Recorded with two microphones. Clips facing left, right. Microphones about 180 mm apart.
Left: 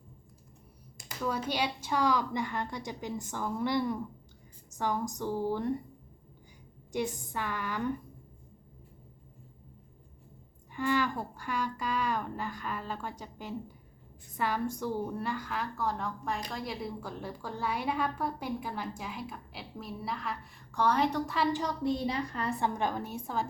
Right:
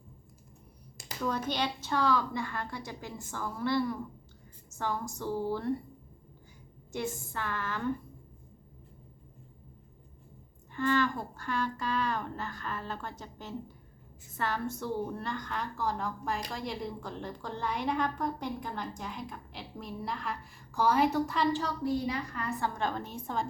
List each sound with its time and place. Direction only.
1.5 s speech: 10° left (ahead or behind)
6.9 s speech: 15° left (ahead or behind)
10.7 s a woman's voice: 10° left (ahead or behind)
21.5 s speech: 20° left (ahead or behind)
22.0 s a woman's voice: 30° left (ahead or behind)
22.6 s speech: 15° left (ahead or behind)